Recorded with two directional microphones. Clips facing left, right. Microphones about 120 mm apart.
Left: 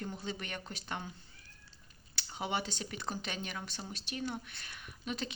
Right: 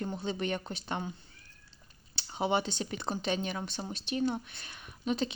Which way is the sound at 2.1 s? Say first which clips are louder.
Right 7 dB; 25° right (ahead or behind).